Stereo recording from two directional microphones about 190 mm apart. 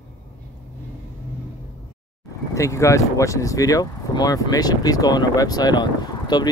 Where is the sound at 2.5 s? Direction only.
15° left (ahead or behind).